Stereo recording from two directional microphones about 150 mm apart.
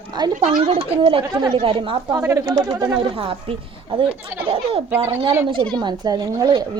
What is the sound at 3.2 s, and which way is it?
Speech, 35° right (ahead or behind).